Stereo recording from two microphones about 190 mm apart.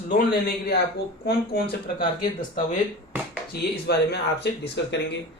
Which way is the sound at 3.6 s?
60° left (ahead or behind).